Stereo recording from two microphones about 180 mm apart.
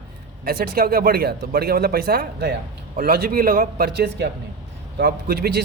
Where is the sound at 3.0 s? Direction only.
55° right (ahead or behind).